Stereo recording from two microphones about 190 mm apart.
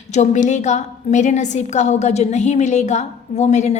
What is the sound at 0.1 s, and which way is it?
A woman's voice, 40° left (ahead or behind).